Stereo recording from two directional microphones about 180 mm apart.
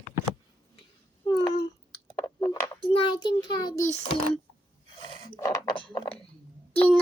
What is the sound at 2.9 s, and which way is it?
Speech, 25° left (ahead or behind).